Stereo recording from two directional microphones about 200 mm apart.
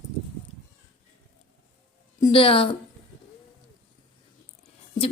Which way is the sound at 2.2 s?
20° left (ahead or behind).